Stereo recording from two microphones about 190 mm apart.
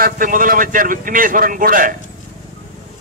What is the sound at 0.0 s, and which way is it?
A man's voice, 45° right (ahead or behind).